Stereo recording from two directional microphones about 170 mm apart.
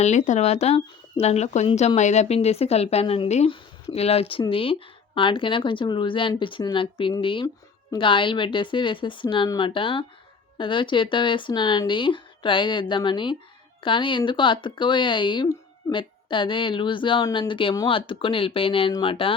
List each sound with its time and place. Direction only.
0.0 s speech: 45° left (ahead or behind)